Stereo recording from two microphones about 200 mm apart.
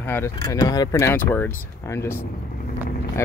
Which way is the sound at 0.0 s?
10° left (ahead or behind).